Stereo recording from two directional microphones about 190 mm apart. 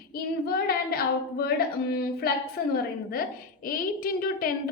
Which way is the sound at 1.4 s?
55° left (ahead or behind).